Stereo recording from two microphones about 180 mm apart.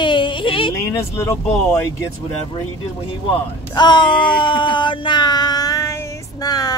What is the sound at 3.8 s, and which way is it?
Speech, 25° left (ahead or behind).